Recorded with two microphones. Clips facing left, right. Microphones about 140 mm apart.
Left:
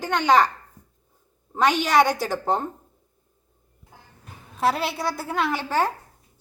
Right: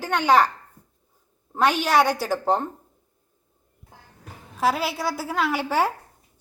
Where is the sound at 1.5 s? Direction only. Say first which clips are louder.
Left 1 dB; 5° right (ahead or behind).